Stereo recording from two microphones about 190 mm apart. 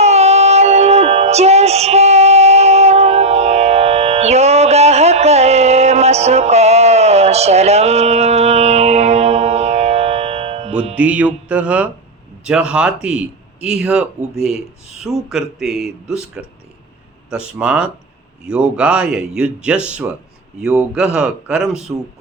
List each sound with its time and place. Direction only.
0.0 s female singing: 35° right (ahead or behind)
10.9 s music: 5° right (ahead or behind)
12.5 s speech: 5° right (ahead or behind)
17.6 s speech: 5° right (ahead or behind)